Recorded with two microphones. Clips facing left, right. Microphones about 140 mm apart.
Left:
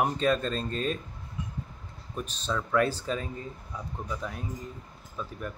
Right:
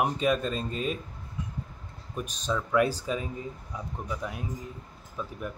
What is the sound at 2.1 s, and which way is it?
Speech, 10° right (ahead or behind).